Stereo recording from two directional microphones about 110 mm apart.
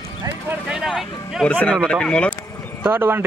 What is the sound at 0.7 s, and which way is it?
Speech, 5° right (ahead or behind).